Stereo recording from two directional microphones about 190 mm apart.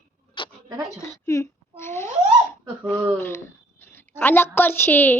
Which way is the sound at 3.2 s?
15° left (ahead or behind).